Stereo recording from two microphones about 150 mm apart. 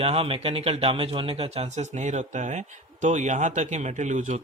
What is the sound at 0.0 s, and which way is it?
Speech, 40° right (ahead or behind).